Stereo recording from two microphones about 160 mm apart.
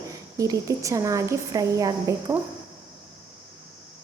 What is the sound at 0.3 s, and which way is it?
A woman's voice, 20° right (ahead or behind).